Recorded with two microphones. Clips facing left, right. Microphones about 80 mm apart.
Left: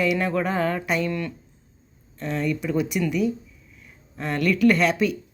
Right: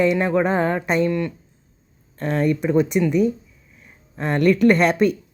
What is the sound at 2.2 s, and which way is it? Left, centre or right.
Speech, right.